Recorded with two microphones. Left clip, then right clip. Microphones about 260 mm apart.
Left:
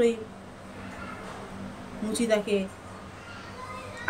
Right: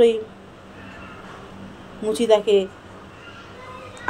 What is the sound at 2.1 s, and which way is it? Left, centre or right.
Speech, centre.